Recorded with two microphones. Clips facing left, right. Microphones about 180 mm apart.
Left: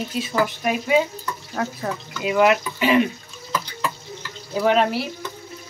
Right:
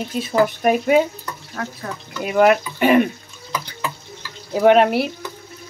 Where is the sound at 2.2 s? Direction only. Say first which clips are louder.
Right 2 dB; 45° right (ahead or behind).